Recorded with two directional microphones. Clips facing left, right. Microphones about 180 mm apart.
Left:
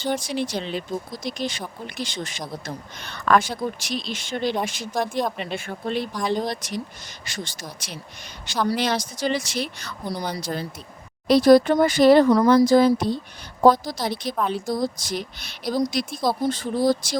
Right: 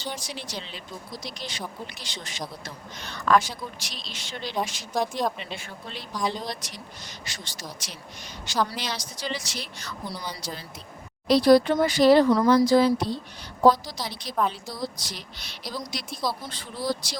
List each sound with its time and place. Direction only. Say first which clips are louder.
0.0 s speech: left 10 dB; 55° left (ahead or behind)